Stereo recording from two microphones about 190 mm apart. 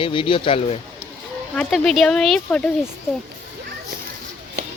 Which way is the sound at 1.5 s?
Centre (ahead or behind).